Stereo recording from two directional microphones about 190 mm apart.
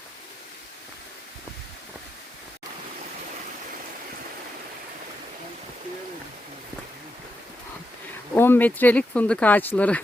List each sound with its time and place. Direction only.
8.4 s speech: 10° left (ahead or behind)